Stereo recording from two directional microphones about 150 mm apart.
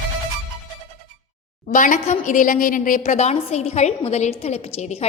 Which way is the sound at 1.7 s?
60° left (ahead or behind).